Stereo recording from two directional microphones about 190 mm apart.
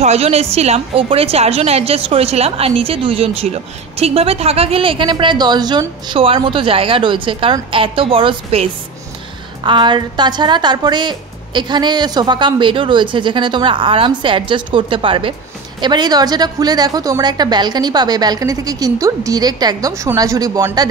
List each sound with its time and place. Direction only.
0.0 s a woman's voice: 35° right (ahead or behind)